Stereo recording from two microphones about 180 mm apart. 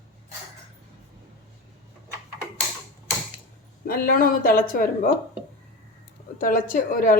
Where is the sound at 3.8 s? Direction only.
55° left (ahead or behind).